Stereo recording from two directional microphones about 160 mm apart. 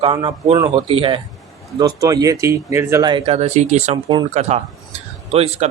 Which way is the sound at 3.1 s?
40° right (ahead or behind).